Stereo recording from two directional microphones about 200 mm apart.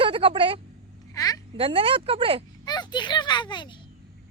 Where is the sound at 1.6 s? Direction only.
25° right (ahead or behind).